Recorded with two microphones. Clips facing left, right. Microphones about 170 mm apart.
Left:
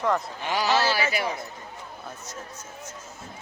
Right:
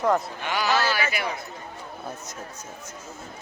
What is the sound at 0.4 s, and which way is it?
Speech, 30° left (ahead or behind).